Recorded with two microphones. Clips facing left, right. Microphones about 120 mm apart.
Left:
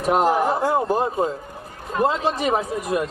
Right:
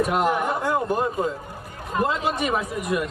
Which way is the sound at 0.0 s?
30° left (ahead or behind).